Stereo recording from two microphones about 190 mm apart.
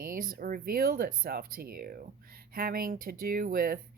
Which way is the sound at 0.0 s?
50° right (ahead or behind).